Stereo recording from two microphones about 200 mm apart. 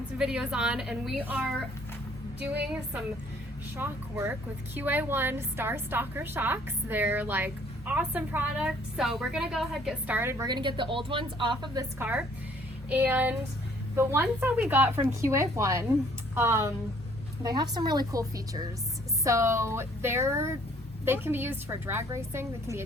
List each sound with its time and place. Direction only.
0.2 s a woman's voice: 5° right (ahead or behind)